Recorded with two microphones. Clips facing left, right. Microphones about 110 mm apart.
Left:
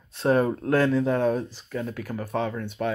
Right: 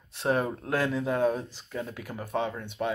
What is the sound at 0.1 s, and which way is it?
Speech, 10° right (ahead or behind).